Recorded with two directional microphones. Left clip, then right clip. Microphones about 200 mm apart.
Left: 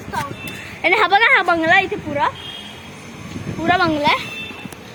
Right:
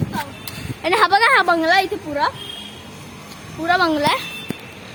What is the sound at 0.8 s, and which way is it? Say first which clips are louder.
Speech: left 1 dB; centre (ahead or behind).